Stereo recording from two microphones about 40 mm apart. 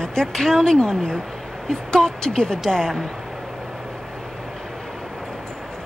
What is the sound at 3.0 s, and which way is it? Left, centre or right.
Vehicle, centre.